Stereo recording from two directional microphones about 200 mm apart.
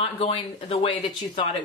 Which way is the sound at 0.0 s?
30° left (ahead or behind).